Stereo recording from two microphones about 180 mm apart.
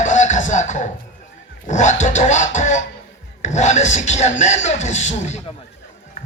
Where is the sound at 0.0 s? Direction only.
45° left (ahead or behind).